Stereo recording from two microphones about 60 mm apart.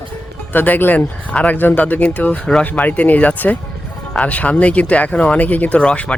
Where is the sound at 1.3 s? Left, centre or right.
Centre.